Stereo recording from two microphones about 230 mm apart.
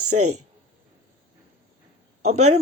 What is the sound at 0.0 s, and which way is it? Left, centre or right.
Speech, right.